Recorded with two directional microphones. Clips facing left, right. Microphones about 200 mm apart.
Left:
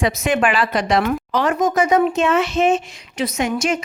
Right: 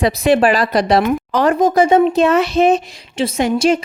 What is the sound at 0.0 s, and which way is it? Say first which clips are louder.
A woman's voice: right 5 dB; 35° right (ahead or behind).